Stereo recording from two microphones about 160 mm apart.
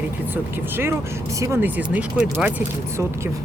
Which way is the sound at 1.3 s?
15° right (ahead or behind).